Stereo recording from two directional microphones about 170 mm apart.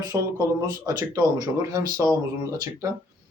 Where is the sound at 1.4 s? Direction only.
20° right (ahead or behind).